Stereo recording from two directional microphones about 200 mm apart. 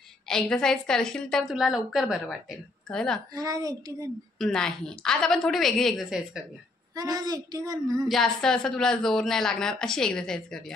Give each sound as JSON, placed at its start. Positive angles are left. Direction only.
{"t": 0.3, "sound": "a woman's voice", "side_deg": 5}
{"t": 3.3, "sound": "a woman's voice", "side_deg": -15}
{"t": 4.4, "sound": "a woman's voice", "side_deg": 0}
{"t": 7.0, "sound": "a woman's voice", "side_deg": -20}
{"t": 8.1, "sound": "a woman's voice", "side_deg": 0}